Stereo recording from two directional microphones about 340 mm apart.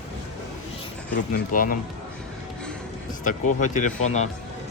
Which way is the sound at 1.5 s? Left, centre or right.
Left.